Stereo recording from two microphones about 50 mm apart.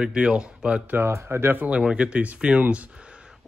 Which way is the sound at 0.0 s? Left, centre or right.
Centre.